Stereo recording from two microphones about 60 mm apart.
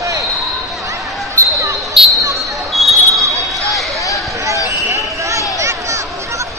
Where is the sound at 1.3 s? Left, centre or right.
Right.